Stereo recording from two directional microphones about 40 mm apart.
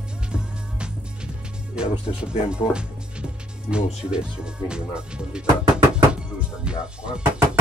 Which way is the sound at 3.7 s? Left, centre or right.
Right.